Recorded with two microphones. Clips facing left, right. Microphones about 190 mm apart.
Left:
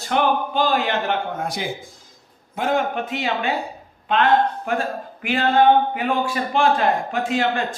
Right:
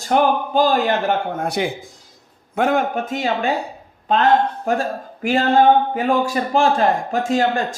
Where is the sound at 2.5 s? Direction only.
50° right (ahead or behind).